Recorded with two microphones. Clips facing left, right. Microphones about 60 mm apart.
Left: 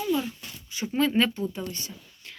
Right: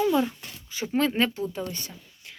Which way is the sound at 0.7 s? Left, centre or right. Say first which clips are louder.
Right 3 dB; right.